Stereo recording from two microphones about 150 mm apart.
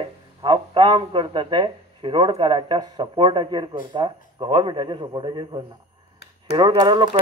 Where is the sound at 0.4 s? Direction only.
30° right (ahead or behind).